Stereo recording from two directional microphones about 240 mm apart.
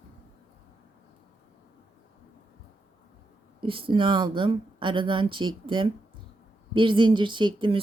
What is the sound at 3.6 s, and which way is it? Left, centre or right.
A woman's voice, right.